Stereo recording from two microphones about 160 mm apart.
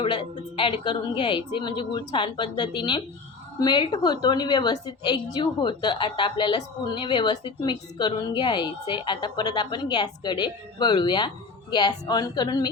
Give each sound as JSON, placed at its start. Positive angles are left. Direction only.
{"t": 0.0, "sound": "a woman's voice", "side_deg": 30}